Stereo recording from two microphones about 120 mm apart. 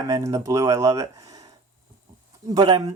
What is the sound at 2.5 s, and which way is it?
Speech, 40° right (ahead or behind).